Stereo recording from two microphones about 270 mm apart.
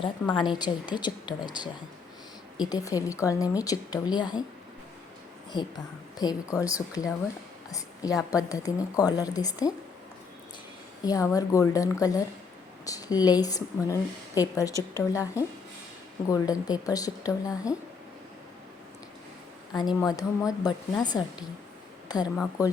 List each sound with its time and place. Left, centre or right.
0.0 s a woman's voice: centre
5.5 s a woman's voice: centre
11.0 s a woman's voice: centre
20.0 s a woman's voice: centre